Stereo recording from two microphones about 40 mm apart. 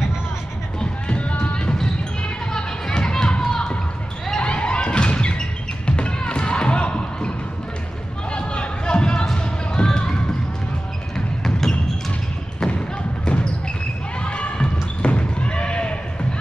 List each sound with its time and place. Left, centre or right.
0.7 s run: left
2.2 s children playing: left
4.4 s thump: left
8.3 s a sound: left
9.3 s music: left
12.6 s basketball bounce: left